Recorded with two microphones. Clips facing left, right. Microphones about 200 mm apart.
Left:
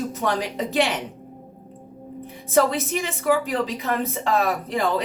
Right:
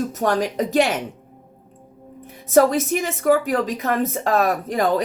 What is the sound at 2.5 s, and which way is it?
A woman's voice, 45° right (ahead or behind).